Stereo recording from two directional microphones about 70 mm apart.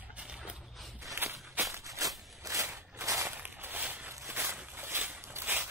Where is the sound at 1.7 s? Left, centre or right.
Right.